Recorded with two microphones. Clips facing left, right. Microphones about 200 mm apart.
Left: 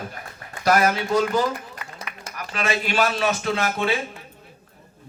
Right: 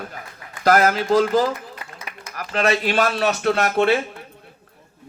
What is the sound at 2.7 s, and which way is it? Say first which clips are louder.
A man's voice: right 2 dB; 55° right (ahead or behind).